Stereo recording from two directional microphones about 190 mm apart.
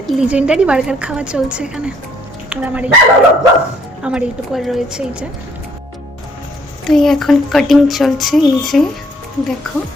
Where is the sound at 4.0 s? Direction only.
5° right (ahead or behind).